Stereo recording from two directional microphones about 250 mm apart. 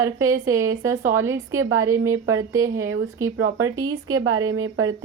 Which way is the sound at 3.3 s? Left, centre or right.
Right.